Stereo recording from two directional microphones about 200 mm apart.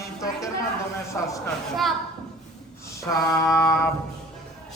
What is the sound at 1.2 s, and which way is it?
Speech, 10° left (ahead or behind).